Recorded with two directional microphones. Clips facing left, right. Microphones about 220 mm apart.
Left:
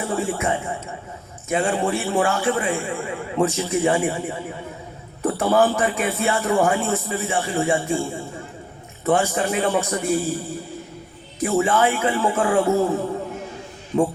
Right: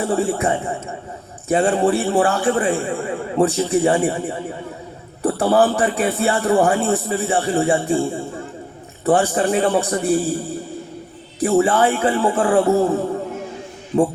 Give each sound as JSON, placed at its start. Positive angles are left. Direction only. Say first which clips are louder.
{"t": 0.1, "sound": "a man's voice", "louder": "right 2 dB", "side_deg": -35}
{"t": 11.3, "sound": "a man's voice", "louder": "right 4 dB", "side_deg": -35}